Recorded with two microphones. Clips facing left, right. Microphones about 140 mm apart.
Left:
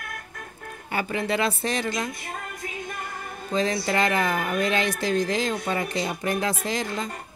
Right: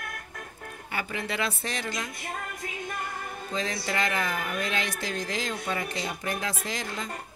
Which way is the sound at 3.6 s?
35° left (ahead or behind).